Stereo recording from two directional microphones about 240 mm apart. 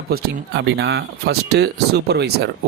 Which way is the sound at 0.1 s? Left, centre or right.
Right.